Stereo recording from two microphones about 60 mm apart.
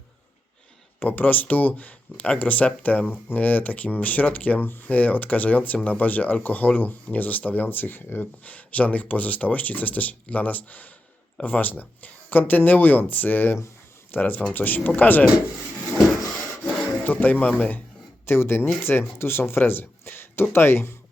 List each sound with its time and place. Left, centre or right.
0.9 s speech: left
17.0 s speech: left
18.3 s speech: left